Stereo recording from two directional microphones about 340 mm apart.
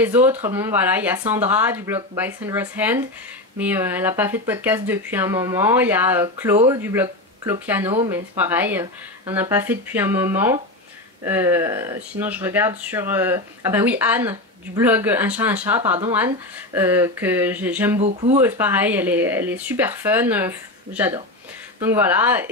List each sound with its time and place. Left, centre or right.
0.0 s speech: centre
17.9 s speech: centre
18.4 s speech: centre